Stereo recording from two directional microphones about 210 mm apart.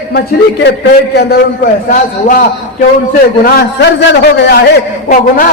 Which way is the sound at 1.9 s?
40° left (ahead or behind).